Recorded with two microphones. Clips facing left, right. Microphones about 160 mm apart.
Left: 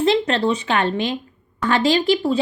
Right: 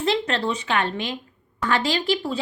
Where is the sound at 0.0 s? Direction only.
25° left (ahead or behind).